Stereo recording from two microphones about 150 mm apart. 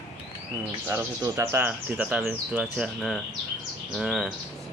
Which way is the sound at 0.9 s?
20° right (ahead or behind).